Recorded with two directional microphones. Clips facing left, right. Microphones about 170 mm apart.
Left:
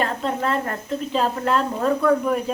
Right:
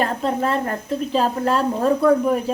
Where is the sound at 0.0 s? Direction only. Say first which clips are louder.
Right 2 dB; 40° right (ahead or behind).